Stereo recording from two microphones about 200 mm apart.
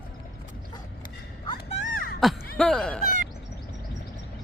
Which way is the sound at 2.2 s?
Centre (ahead or behind).